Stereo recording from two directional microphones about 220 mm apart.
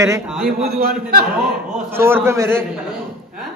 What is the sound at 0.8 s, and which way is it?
Speech, 45° right (ahead or behind).